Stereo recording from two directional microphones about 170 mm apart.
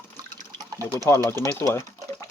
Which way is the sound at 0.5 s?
20° right (ahead or behind).